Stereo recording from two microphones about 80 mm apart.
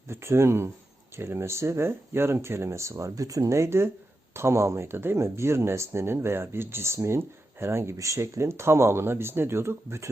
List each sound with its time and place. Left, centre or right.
0.1 s speech: right